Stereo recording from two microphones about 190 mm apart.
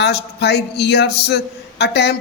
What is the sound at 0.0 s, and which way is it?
Speech, 60° left (ahead or behind).